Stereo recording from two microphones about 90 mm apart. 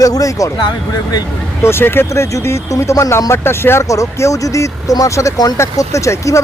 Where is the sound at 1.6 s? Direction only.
25° left (ahead or behind).